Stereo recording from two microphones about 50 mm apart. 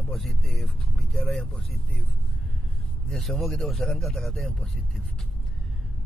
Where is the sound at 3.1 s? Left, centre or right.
Centre.